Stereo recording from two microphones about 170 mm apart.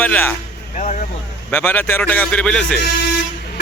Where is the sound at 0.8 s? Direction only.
45° left (ahead or behind).